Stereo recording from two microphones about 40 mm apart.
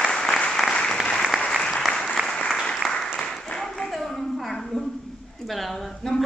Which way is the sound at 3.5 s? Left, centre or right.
Centre.